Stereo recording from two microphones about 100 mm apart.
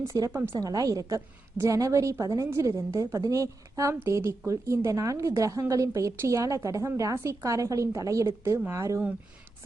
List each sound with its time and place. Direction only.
0.3 s a woman's voice: 20° right (ahead or behind)
0.6 s a woman's voice: 40° right (ahead or behind)